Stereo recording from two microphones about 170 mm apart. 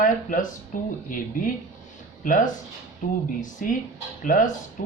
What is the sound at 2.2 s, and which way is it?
Speech, 50° left (ahead or behind).